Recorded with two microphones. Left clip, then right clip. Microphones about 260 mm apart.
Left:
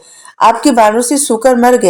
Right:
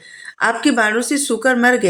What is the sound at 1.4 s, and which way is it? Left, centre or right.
Speech, left.